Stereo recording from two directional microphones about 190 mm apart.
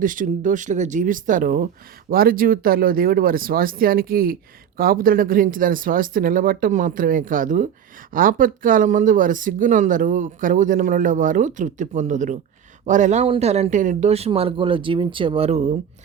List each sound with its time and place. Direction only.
0.0 s speech: 45° right (ahead or behind)